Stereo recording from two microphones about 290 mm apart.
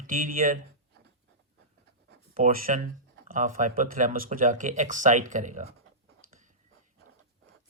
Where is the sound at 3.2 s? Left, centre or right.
Right.